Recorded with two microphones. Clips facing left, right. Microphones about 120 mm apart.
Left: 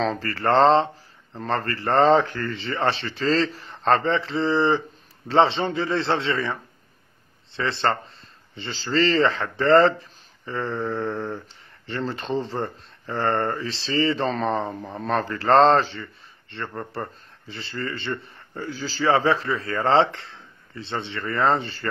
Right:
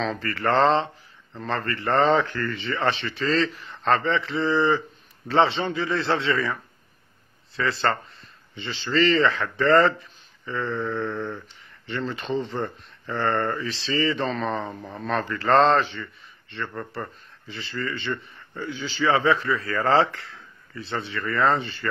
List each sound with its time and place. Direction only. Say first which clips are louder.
0.0 s a man's voice: left 2 dB; 35° left (ahead or behind)